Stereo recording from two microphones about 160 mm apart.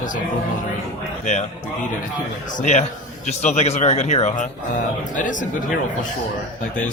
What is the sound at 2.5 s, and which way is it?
Speech, 45° left (ahead or behind).